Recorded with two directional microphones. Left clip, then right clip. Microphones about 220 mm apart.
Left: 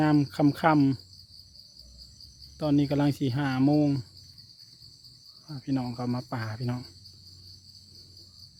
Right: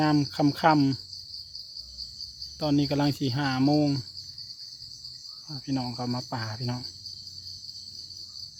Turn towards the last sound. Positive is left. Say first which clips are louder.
# right 2 dB
turn(degrees=5)  # may be behind; listen again after turning